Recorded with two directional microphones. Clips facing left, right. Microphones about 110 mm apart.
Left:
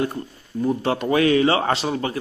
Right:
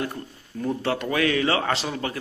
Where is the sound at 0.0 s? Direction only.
20° left (ahead or behind).